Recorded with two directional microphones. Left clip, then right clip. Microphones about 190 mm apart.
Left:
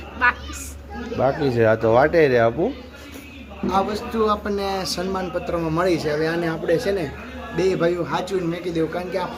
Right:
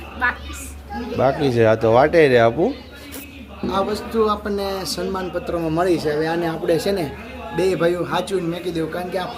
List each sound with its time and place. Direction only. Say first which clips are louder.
0.2 s a woman's voice: left 2 dB; 10° left (ahead or behind)
1.2 s speech: right 2 dB; 10° right (ahead or behind)
3.7 s a man's voice: even; 5° left (ahead or behind)
6.7 s speech: right 1 dB; 20° right (ahead or behind)
7.5 s speech: right 1 dB; 5° right (ahead or behind)